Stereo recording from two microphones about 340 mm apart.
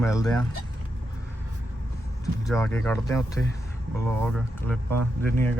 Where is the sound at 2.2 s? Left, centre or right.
Centre.